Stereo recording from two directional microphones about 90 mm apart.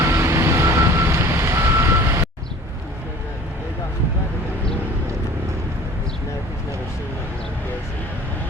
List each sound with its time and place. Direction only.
0.0 s reversing beeps: 30° right (ahead or behind)